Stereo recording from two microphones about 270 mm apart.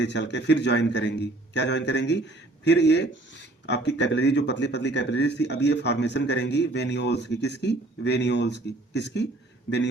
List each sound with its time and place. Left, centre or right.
0.0 s a man's voice: left